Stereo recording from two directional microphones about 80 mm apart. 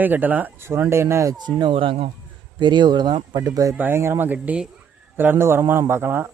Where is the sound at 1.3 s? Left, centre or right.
Right.